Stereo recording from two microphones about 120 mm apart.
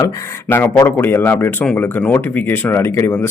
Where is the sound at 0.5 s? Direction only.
15° left (ahead or behind).